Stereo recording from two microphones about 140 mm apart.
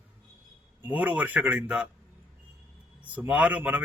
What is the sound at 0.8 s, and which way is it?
Speech, 10° right (ahead or behind).